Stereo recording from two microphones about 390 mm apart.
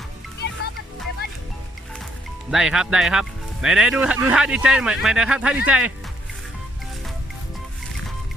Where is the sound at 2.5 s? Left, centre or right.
Centre.